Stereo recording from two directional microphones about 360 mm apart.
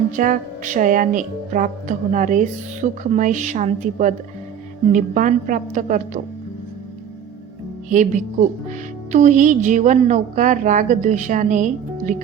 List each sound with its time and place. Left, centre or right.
0.2 s a woman's voice: right
7.9 s a woman's voice: right